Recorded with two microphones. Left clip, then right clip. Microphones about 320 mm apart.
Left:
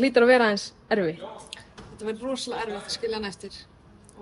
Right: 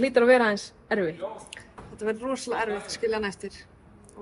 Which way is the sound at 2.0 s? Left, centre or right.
Centre.